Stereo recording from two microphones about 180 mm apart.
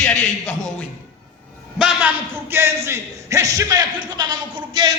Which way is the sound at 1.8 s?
5° right (ahead or behind).